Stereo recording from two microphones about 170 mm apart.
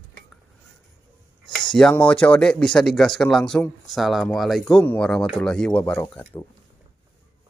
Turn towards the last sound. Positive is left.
turn(degrees=15)  # may be behind; listen again after turning